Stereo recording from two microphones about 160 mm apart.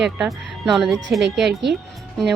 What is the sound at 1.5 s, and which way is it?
Speech, 90° right.